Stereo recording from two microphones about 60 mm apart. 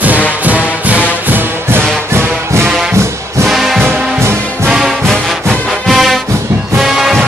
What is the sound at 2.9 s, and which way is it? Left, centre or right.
Music, right.